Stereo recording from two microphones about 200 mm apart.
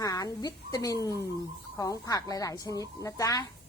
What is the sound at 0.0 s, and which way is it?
A woman's voice, 15° left (ahead or behind).